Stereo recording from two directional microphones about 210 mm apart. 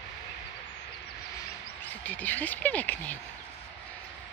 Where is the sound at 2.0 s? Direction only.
5° left (ahead or behind).